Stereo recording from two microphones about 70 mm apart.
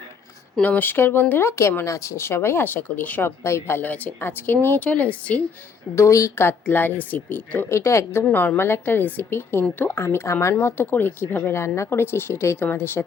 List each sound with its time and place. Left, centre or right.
0.6 s speech: left
3.8 s speech: left
5.9 s speech: left
6.3 s speech: left
7.7 s speech: left
8.2 s speech: left